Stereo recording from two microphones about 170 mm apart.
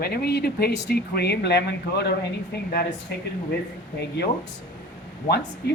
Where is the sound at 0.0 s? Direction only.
65° left (ahead or behind); by 2.1 s 90° left.